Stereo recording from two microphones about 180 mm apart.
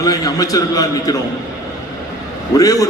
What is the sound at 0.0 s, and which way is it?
A man's voice, 20° left (ahead or behind).